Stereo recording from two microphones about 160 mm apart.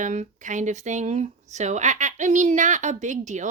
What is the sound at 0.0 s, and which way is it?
Speech, 50° right (ahead or behind).